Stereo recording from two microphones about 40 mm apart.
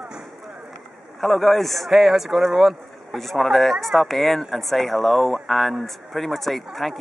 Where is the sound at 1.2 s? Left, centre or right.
Centre.